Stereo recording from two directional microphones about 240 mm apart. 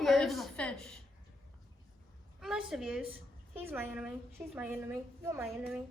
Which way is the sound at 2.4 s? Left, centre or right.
Centre.